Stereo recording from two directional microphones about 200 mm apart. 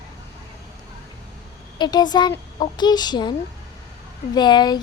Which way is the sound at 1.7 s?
20° left (ahead or behind).